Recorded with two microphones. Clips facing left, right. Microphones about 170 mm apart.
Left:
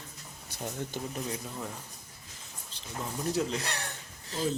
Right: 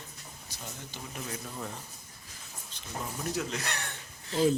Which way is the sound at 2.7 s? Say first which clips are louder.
Left 1 dB; 30° left (ahead or behind).